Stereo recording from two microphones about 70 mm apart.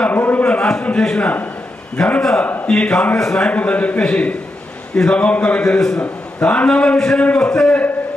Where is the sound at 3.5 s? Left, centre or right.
Centre.